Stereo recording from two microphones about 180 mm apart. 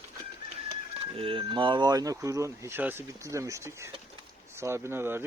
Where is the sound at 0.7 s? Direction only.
30° right (ahead or behind).